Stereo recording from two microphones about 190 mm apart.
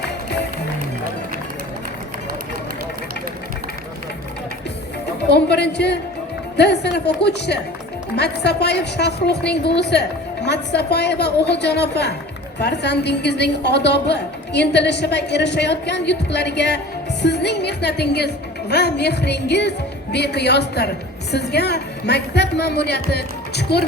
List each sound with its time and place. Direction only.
5.3 s a woman's voice: 60° left (ahead or behind)